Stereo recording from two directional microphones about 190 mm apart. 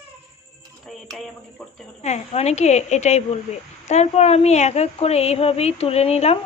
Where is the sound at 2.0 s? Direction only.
35° left (ahead or behind).